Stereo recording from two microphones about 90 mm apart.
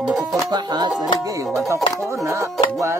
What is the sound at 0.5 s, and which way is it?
Music, 50° right (ahead or behind).